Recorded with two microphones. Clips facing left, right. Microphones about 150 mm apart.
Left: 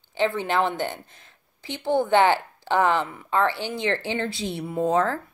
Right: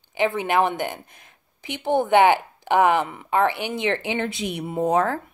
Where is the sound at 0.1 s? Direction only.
15° right (ahead or behind).